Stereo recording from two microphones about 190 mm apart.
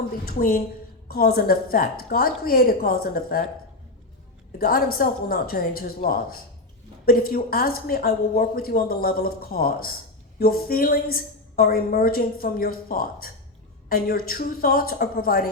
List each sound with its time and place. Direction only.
0.3 s a woman's voice: 50° left (ahead or behind)
4.5 s a woman's voice: 50° left (ahead or behind)